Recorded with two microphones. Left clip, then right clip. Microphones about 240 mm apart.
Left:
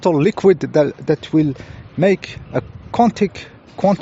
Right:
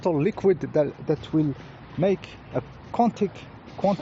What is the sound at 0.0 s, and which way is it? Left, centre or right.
Speech, left.